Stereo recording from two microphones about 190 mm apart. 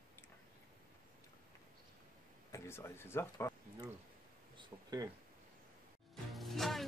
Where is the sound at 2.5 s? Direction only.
15° left (ahead or behind).